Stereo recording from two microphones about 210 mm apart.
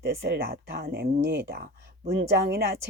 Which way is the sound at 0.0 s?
50° right (ahead or behind).